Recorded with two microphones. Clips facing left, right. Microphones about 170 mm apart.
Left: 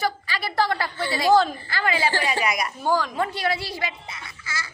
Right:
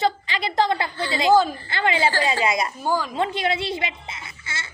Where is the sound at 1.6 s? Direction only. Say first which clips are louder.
Right 2 dB; 25° right (ahead or behind).